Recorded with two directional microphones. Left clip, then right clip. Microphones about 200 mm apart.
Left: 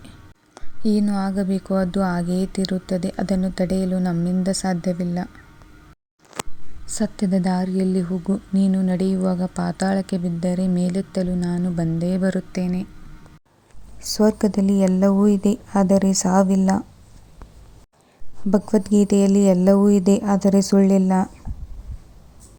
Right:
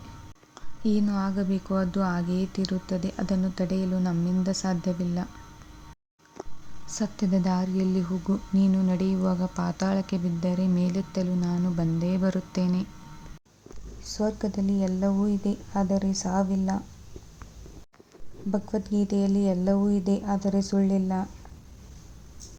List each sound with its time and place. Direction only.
1.0 s speech: 25° left (ahead or behind)
6.9 s speech: 25° left (ahead or behind)
14.0 s a woman's voice: 50° left (ahead or behind)
18.5 s a woman's voice: 45° left (ahead or behind)